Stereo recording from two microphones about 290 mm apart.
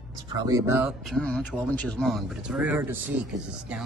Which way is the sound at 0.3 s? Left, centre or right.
Centre.